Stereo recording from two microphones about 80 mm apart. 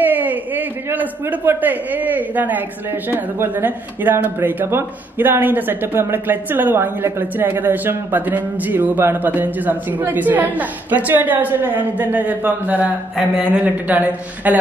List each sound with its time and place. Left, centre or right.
0.0 s speech: right